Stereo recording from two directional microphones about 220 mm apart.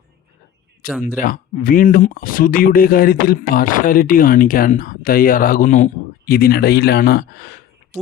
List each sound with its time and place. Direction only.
0.8 s speech: 40° left (ahead or behind)